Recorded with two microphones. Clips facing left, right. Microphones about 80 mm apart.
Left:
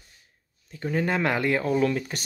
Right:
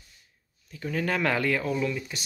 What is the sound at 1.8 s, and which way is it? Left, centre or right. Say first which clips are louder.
Speech: left 5 dB; left.